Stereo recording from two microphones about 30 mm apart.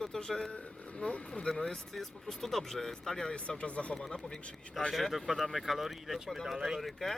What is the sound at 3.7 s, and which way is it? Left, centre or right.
Speech, left.